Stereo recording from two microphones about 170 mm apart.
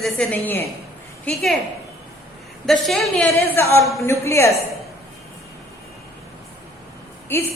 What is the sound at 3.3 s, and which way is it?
A woman's voice, 15° left (ahead or behind).